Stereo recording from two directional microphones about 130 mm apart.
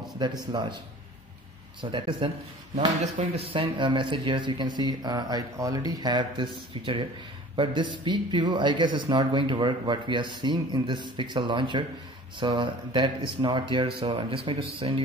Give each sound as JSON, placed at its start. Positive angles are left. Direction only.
{"t": 0.4, "sound": "speech", "side_deg": -35}
{"t": 1.8, "sound": "speech", "side_deg": -40}